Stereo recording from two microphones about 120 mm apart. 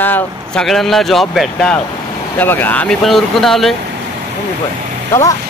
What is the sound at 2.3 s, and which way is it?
Speech, 15° left (ahead or behind).